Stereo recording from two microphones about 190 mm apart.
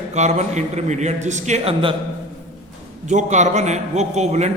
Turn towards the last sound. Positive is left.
turn(degrees=-35)  # may be behind; listen again after turning